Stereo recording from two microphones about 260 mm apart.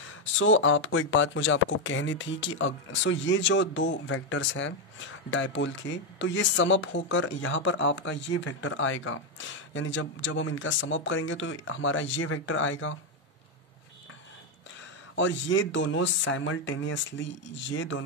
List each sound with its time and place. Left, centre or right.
0.1 s speech: left
15.1 s speech: left